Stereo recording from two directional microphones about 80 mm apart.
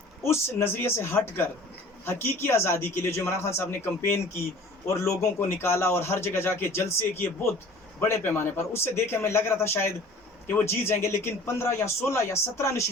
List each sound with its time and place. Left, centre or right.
0.2 s a man's voice: left